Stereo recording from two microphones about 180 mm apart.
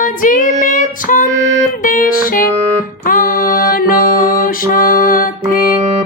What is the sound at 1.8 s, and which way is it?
Music, 50° left (ahead or behind).